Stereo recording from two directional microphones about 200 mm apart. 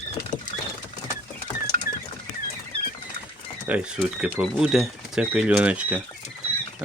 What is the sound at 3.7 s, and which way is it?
Speech, 5° right (ahead or behind).